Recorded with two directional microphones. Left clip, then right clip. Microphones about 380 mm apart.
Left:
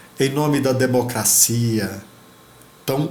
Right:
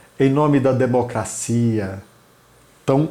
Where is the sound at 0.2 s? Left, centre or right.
Right.